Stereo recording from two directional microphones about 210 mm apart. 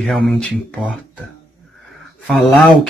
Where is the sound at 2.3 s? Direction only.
Centre (ahead or behind).